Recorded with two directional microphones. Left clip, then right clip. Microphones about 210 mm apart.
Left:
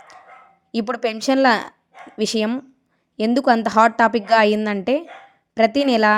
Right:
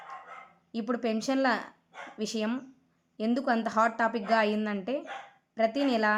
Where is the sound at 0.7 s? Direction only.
40° left (ahead or behind).